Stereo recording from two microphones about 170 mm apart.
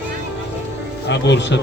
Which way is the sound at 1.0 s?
90° left.